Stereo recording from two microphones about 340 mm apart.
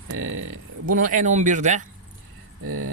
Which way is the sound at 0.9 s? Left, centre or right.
Right.